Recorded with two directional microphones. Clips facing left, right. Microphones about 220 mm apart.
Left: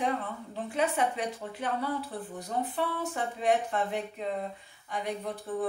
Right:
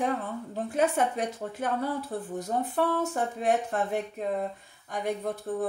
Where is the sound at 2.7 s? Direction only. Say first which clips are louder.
Right 5 dB; 45° right (ahead or behind).